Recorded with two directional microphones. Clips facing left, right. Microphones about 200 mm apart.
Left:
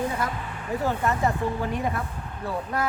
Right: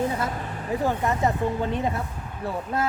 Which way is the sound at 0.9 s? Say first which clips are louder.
Even; 20° right (ahead or behind).